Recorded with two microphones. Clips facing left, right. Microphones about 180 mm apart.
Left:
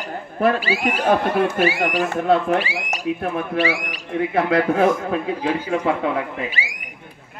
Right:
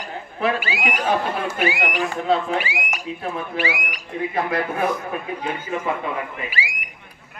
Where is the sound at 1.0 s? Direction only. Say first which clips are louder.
Left 6 dB; 65° left (ahead or behind).